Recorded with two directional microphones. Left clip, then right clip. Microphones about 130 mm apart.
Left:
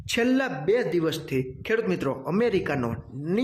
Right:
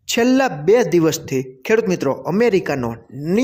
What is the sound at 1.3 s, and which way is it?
Speech, 40° right (ahead or behind).